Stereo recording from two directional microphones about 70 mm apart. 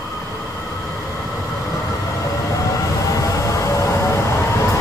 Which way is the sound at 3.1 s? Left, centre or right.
Left.